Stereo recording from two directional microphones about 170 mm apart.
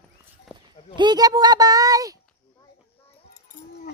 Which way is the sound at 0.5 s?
Centre (ahead or behind).